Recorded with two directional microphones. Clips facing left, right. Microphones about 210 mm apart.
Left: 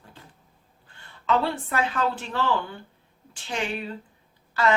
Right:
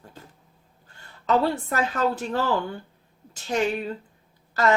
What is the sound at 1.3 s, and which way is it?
Speech, 40° right (ahead or behind).